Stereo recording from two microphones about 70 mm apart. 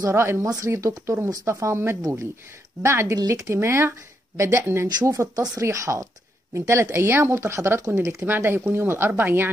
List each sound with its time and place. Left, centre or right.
0.1 s speech: right
2.0 s speech: right
2.8 s speech: right
3.5 s speech: right
5.0 s speech: right
8.3 s speech: right